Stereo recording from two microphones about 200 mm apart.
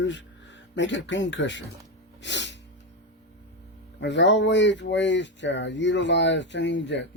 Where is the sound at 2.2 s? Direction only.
65° left (ahead or behind).